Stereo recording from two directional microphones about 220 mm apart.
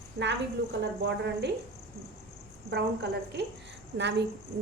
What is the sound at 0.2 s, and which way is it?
A woman's voice, 45° right (ahead or behind).